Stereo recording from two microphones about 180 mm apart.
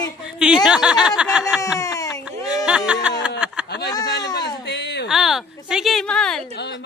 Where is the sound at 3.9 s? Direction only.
20° left (ahead or behind).